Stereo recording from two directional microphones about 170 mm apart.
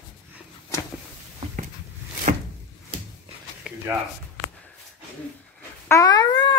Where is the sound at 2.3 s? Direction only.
50° right (ahead or behind).